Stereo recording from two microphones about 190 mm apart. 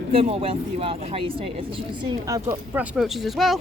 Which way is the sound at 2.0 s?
20° right (ahead or behind).